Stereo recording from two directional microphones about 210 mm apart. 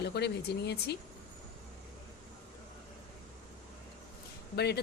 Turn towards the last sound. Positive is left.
turn(degrees=50)  # may be behind; listen again after turning